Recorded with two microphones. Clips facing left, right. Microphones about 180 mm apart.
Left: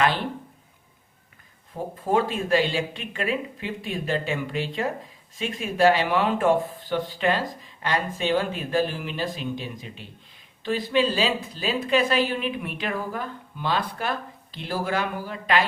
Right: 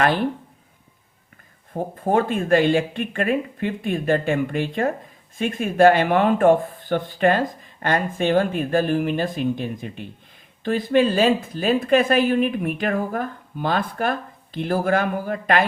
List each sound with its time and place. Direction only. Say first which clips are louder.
1.7 s speech: right 3 dB; 50° right (ahead or behind)